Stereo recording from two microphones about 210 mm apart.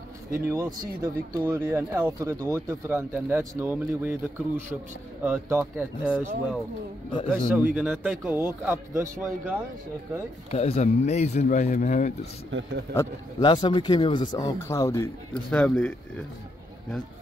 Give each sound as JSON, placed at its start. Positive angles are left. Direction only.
{"t": 0.3, "sound": "speech", "side_deg": -15}
{"t": 7.5, "sound": "speech", "side_deg": -10}
{"t": 10.5, "sound": "speech", "side_deg": 30}
{"t": 12.4, "sound": "a man's voice", "side_deg": -65}
{"t": 12.9, "sound": "speech", "side_deg": 15}